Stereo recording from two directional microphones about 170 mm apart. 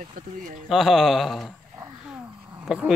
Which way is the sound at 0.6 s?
Centre (ahead or behind).